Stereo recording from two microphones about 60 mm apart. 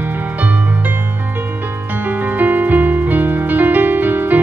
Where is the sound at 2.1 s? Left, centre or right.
Right.